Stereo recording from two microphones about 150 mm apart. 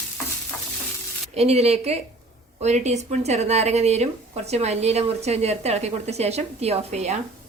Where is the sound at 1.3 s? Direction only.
45° right (ahead or behind).